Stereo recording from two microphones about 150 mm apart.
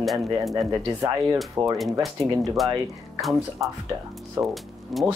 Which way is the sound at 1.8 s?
Centre (ahead or behind).